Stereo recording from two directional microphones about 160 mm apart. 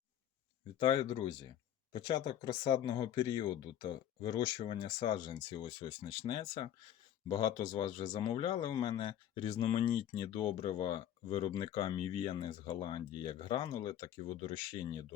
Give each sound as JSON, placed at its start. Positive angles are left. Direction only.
{"t": 0.8, "sound": "speech", "side_deg": 30}